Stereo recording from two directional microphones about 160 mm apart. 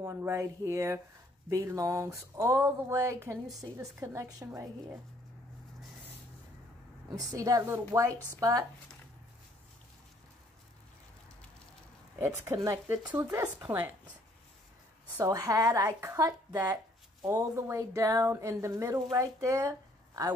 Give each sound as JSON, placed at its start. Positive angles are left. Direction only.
{"t": 0.0, "sound": "speech", "side_deg": -20}
{"t": 7.3, "sound": "speech", "side_deg": -20}
{"t": 12.4, "sound": "speech", "side_deg": -20}
{"t": 15.1, "sound": "speech", "side_deg": -20}